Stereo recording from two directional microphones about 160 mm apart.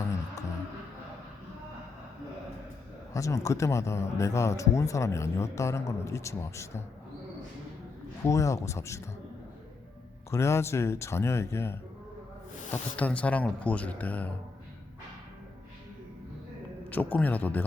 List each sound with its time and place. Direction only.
3.1 s speech: 20° left (ahead or behind)
8.2 s speech: 20° left (ahead or behind)
10.3 s speech: 15° left (ahead or behind)
16.9 s speech: 10° left (ahead or behind)